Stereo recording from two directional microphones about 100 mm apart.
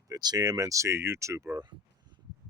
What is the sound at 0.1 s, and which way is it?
Speech, 40° right (ahead or behind).